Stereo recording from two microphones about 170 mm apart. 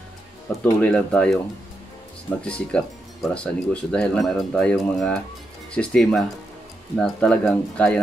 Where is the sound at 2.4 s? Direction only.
5° left (ahead or behind).